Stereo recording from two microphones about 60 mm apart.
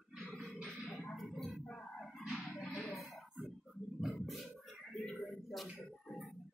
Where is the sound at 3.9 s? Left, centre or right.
Centre.